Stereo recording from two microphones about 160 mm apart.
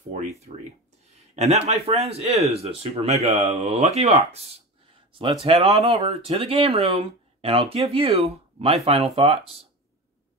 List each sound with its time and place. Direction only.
0.1 s speech: 50° right (ahead or behind)